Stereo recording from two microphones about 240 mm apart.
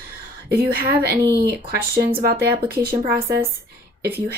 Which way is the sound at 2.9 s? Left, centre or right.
Centre.